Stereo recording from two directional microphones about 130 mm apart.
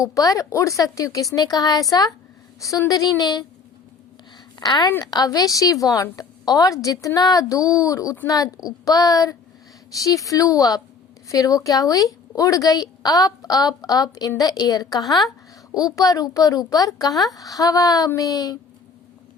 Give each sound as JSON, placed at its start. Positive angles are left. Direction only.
{"t": 0.0, "sound": "a woman's voice", "side_deg": 25}
{"t": 4.9, "sound": "a woman's voice", "side_deg": 25}